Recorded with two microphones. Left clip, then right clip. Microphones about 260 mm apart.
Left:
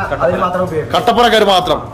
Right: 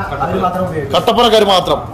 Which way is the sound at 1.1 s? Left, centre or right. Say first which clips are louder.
Even; centre.